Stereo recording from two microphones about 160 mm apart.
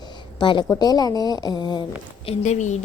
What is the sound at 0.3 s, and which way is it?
A woman's voice, 30° left (ahead or behind).